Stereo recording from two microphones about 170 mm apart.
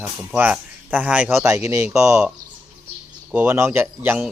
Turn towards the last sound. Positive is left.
turn(degrees=-10)  # may be behind; listen again after turning